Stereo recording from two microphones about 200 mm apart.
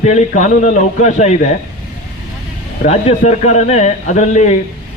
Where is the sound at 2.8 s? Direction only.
35° left (ahead or behind).